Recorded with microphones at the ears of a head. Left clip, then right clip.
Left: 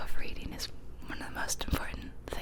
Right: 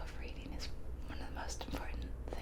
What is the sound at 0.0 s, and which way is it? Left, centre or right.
Whispering, left.